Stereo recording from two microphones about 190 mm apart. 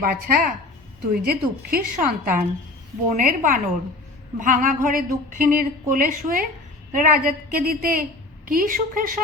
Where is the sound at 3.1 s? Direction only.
45° right (ahead or behind).